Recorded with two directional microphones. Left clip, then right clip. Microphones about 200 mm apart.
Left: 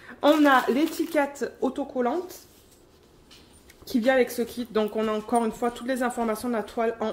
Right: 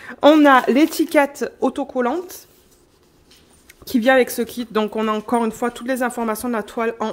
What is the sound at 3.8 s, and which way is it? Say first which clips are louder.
Speech: right 7 dB; 40° right (ahead or behind).